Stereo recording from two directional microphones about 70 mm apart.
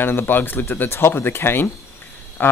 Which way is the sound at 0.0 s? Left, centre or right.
Left.